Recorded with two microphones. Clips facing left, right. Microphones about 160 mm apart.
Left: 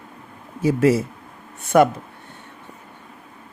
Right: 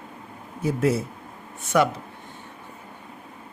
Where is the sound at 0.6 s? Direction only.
90° left.